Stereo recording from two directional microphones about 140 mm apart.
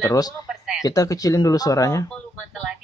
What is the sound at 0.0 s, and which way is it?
Speech, 25° left (ahead or behind).